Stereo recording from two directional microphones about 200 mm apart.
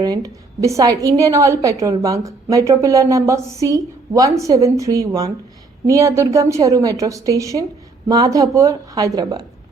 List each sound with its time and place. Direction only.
0.0 s a woman's voice: 15° right (ahead or behind)